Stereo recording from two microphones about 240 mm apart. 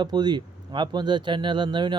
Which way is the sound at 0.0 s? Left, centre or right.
Centre.